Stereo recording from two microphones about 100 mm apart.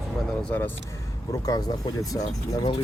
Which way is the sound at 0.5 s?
20° left (ahead or behind).